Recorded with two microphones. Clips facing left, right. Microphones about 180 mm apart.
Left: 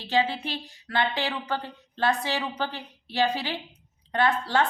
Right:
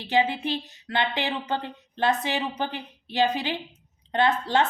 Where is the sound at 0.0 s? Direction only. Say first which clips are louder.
Right 2 dB; 15° right (ahead or behind).